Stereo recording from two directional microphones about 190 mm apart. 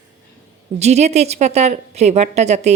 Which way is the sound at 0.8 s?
35° right (ahead or behind).